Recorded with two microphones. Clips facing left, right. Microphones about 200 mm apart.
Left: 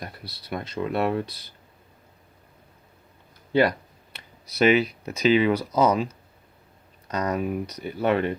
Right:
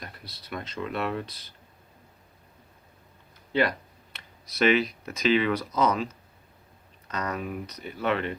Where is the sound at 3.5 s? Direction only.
35° left (ahead or behind).